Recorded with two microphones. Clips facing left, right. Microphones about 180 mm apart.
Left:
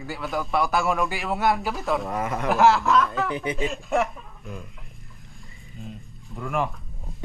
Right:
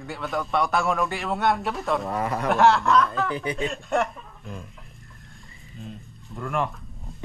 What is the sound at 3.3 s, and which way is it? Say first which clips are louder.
Speech: left 1 dB; 20° left (ahead or behind).